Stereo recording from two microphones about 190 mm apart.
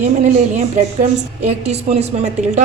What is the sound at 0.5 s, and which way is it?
A woman's voice, 40° right (ahead or behind).